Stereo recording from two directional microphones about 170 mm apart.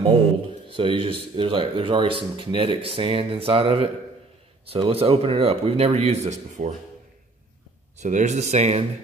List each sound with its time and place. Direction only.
0.7 s speech: 30° right (ahead or behind)
8.0 s speech: 45° right (ahead or behind)